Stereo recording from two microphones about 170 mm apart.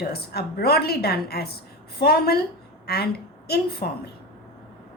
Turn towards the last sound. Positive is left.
turn(degrees=65)  # may be behind; listen again after turning